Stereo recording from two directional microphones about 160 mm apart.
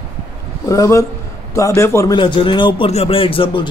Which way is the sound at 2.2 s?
30° left (ahead or behind).